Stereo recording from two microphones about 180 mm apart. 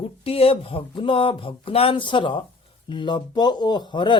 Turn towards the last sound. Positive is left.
turn(degrees=25)  # may be behind; listen again after turning